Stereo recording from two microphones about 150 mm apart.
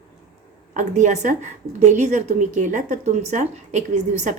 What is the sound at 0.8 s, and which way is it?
A woman's voice, 55° right (ahead or behind).